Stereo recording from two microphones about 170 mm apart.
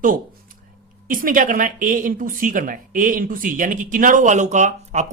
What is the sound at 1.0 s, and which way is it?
A woman's voice, 55° right (ahead or behind).